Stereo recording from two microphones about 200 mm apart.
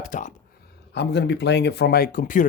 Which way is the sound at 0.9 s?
60° left (ahead or behind).